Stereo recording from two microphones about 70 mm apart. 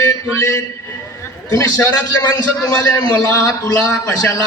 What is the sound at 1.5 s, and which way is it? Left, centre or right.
A man's voice, left.